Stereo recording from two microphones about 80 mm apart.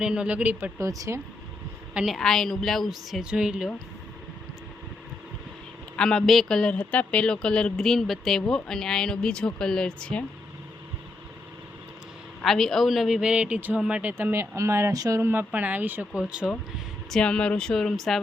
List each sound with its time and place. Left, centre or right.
0.0 s speech: centre
0.8 s speech: right
2.0 s a woman's voice: centre
6.0 s speech: centre
6.7 s speech: centre
12.4 s a woman's voice: centre
14.0 s speech: right
14.5 s speech: right
14.9 s speech: right
15.2 s speech: right
17.1 s speech: centre